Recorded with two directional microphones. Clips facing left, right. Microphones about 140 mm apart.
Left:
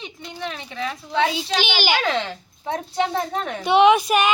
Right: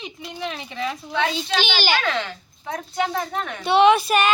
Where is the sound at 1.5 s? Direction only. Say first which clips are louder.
Right 1 dB; 15° left (ahead or behind).